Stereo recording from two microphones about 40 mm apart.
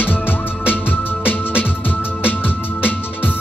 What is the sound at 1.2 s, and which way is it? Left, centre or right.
Music, left.